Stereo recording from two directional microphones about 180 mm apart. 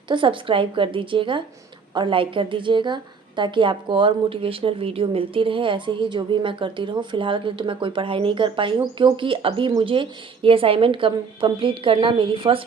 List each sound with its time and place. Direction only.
0.1 s a woman's voice: 30° right (ahead or behind)